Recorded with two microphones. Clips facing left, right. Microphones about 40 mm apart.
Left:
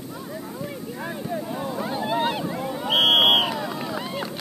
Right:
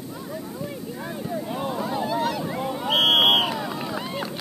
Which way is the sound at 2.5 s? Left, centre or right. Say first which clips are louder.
Right 1 dB; centre.